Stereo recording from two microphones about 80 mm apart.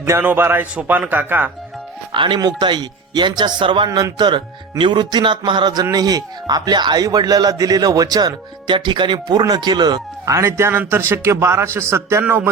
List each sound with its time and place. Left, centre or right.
0.1 s a man's voice: right
2.1 s speech: right
3.8 s speech: right
4.2 s speech: right
5.8 s speech: right
9.4 s speech: right
10.2 s a man's voice: right